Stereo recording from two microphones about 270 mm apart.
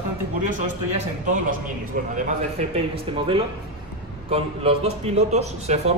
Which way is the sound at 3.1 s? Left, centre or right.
Centre.